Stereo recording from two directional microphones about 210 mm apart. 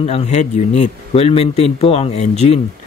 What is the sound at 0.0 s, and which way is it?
A man's voice, 30° left (ahead or behind).